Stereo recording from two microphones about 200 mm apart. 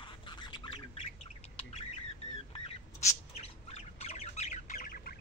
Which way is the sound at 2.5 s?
30° left (ahead or behind).